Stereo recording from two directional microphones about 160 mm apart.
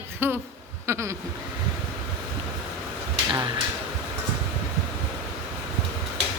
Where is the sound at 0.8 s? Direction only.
15° right (ahead or behind).